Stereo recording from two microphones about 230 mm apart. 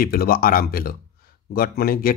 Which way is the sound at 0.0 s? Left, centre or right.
Left.